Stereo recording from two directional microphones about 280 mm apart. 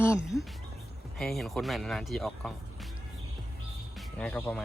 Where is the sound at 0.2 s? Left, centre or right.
Centre.